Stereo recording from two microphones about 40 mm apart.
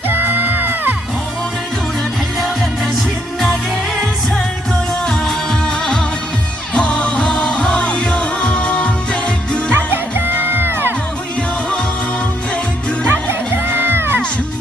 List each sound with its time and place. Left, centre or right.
0.1 s music: right
5.0 s music: centre
6.7 s music: left
9.7 s music: right
13.1 s music: right